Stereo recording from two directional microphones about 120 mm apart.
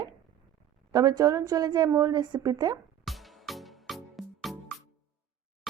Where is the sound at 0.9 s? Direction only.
30° right (ahead or behind).